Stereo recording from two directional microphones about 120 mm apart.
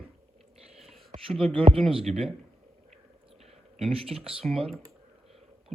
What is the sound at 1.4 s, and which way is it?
Speech, 50° right (ahead or behind).